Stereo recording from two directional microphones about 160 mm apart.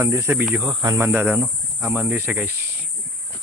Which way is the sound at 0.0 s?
15° right (ahead or behind).